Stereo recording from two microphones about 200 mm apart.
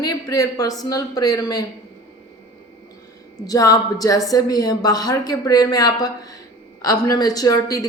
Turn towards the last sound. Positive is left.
turn(degrees=15)  # may be behind; listen again after turning